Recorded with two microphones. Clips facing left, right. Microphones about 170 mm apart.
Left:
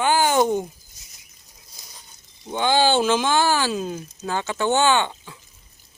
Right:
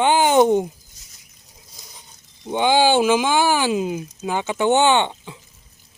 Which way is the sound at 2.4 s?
15° right (ahead or behind).